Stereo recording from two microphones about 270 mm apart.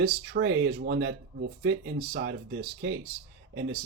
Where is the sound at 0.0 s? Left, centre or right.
Right.